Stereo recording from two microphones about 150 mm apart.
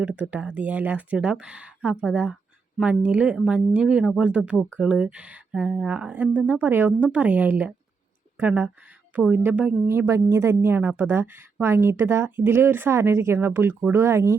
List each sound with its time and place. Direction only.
0.0 s speech: 10° right (ahead or behind)